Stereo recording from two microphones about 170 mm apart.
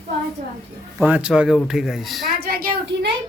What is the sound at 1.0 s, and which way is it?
Speech, 5° right (ahead or behind).